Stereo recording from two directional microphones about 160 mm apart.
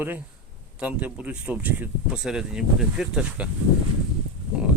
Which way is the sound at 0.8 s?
10° right (ahead or behind).